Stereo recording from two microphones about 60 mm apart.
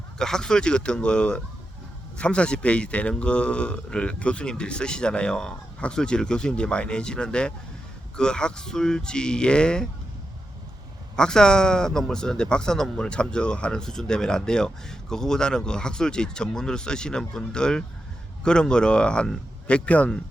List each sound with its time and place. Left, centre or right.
0.2 s speech: centre
11.2 s speech: centre